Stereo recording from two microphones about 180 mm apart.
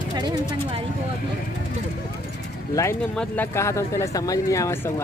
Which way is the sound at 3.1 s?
10° left (ahead or behind).